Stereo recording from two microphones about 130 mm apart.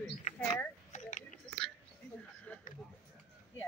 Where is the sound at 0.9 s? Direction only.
70° left (ahead or behind).